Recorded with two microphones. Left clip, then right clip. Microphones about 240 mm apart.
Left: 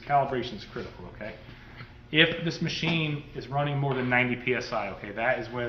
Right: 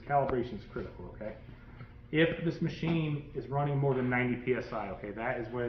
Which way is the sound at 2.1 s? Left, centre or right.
Left.